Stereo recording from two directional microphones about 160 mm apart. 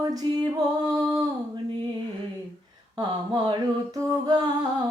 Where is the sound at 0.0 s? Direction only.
25° right (ahead or behind).